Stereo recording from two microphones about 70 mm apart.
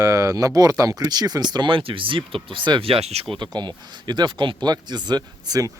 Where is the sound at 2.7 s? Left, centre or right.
Right.